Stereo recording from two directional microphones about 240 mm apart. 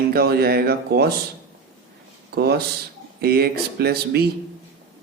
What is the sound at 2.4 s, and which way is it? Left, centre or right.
Speech, right.